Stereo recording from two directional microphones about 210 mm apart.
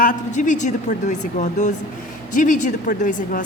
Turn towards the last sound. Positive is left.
turn(degrees=40)  # may be behind; listen again after turning